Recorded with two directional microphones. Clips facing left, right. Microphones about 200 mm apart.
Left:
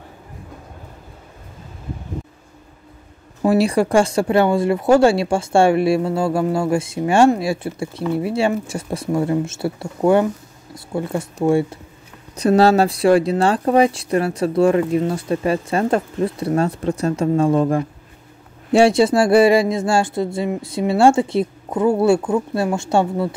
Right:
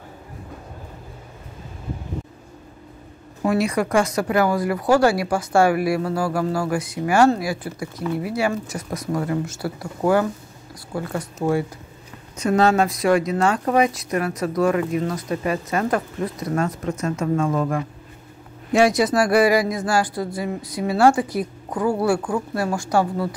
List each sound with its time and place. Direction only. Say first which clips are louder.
3.4 s speech: left 5 dB; 30° left (ahead or behind)